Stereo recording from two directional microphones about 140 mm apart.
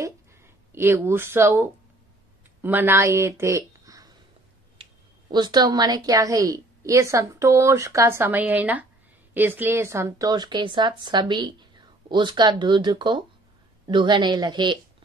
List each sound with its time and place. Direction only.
0.7 s a woman's voice: 15° right (ahead or behind)
4.8 s a sound: 40° right (ahead or behind)
5.3 s a woman's voice: 30° right (ahead or behind)